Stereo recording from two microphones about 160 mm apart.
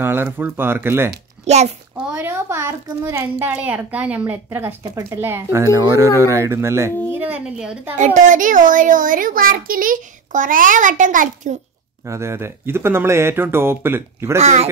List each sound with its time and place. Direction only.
0.0 s a woman's voice: 15° right (ahead or behind)
1.4 s a child's voice: 45° right (ahead or behind)
2.0 s a woman's voice: 10° right (ahead or behind)
8.0 s a child's voice: 50° right (ahead or behind)
12.1 s a woman's voice: 15° right (ahead or behind)
14.4 s speech: 45° right (ahead or behind)